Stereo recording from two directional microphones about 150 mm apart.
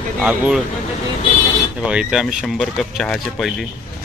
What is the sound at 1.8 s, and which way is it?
Speech, 5° right (ahead or behind).